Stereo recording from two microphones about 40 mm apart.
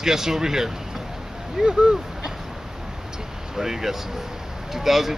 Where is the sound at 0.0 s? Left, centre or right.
Centre.